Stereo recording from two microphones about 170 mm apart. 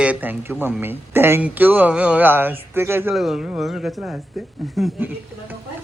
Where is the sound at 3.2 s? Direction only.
Centre (ahead or behind).